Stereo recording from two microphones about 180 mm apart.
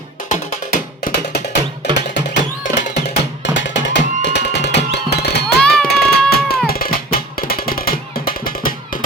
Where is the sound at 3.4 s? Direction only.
80° left.